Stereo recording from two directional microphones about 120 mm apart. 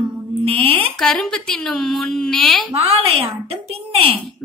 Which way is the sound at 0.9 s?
5° left (ahead or behind).